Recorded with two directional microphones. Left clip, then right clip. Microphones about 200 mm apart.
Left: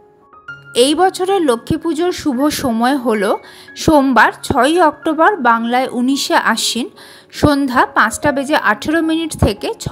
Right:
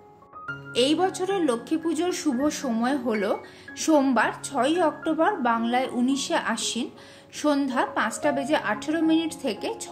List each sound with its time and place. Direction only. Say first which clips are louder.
0.7 s speech: left 11 dB; 35° left (ahead or behind)